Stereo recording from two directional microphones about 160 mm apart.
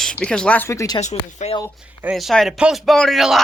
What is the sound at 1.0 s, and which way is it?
Speech, 45° left (ahead or behind).